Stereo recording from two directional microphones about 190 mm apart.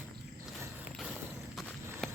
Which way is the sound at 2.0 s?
Centre (ahead or behind).